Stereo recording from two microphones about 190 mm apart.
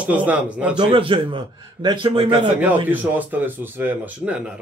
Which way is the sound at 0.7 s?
25° right (ahead or behind).